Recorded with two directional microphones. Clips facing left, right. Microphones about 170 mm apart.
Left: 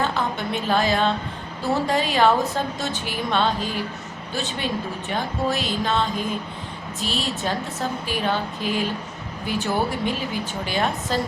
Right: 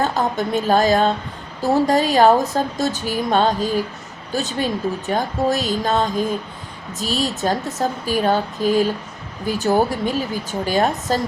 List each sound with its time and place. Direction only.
0.0 s a woman's voice: 40° right (ahead or behind)